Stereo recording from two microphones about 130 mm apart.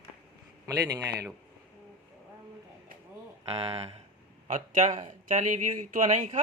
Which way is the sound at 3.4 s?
50° right (ahead or behind).